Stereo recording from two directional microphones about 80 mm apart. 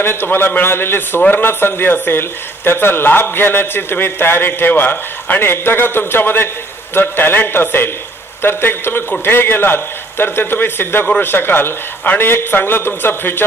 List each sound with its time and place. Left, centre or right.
0.0 s speech: left